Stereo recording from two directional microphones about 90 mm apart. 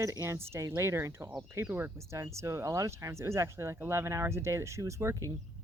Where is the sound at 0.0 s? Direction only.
35° right (ahead or behind).